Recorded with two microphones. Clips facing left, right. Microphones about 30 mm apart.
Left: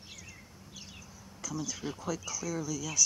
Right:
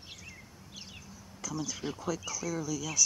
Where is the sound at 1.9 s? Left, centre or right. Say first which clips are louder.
Right 1 dB; centre.